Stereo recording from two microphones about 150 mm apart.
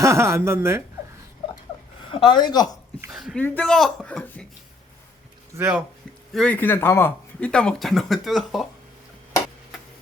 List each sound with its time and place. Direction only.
0.0 s a woman's voice: 20° right (ahead or behind)
2.0 s a woman's voice: 35° left (ahead or behind)
3.1 s speech: 5° right (ahead or behind)
3.3 s speech: 10° left (ahead or behind)
5.5 s a woman's voice: 10° right (ahead or behind)
6.3 s speech: 10° left (ahead or behind)